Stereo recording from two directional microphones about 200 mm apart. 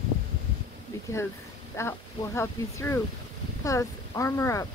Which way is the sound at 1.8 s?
15° left (ahead or behind).